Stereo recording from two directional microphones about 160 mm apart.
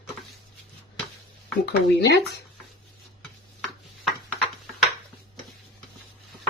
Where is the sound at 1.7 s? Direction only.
90° left.